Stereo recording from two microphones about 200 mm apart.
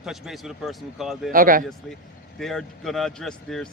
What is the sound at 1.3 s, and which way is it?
Speech, 45° right (ahead or behind).